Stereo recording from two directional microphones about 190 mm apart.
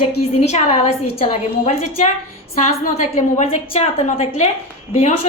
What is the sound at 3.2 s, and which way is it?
A woman's voice, 35° left (ahead or behind).